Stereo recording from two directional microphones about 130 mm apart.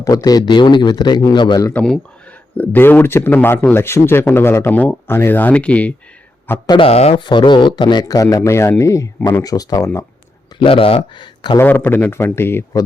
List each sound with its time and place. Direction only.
0.0 s speech: 30° left (ahead or behind)
1.7 s speech: 5° left (ahead or behind)
6.7 s speech: 45° left (ahead or behind); by 10.1 s 20° left (ahead or behind)
10.6 s speech: 45° left (ahead or behind)
11.5 s speech: 15° left (ahead or behind)